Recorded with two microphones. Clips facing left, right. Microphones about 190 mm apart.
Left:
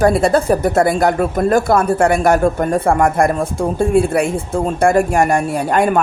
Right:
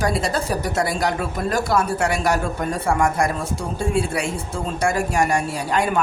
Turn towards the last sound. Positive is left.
turn(degrees=50)  # may be behind; listen again after turning